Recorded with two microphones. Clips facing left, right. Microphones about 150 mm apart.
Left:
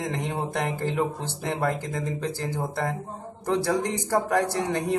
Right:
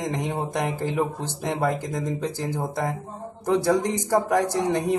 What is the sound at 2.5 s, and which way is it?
Speech, 15° right (ahead or behind).